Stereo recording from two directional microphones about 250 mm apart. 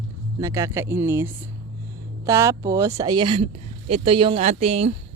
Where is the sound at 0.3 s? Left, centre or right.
Centre.